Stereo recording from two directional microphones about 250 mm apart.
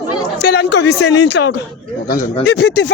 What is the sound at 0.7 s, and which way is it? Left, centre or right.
Speech, left.